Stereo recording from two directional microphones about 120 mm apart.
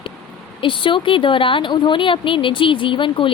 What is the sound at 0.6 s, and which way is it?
Speech, 45° left (ahead or behind).